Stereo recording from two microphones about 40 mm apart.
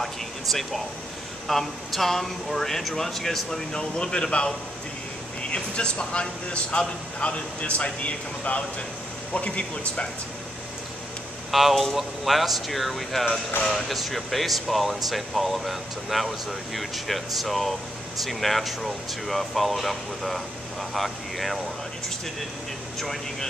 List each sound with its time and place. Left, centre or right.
0.0 s air conditioning: centre
1.5 s speech: centre; by 10.0 s left
11.5 s speech: centre